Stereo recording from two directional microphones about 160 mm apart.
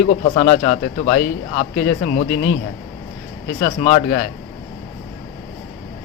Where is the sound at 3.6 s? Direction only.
55° left (ahead or behind).